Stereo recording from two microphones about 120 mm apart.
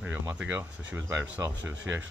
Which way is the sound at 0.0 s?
15° right (ahead or behind).